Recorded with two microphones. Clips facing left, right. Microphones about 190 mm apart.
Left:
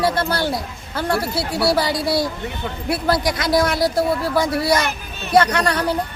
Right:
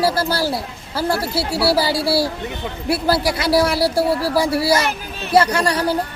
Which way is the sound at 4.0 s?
35° right (ahead or behind).